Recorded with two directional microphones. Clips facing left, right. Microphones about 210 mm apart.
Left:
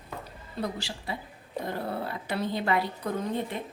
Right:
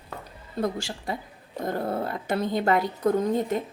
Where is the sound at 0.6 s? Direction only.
45° right (ahead or behind).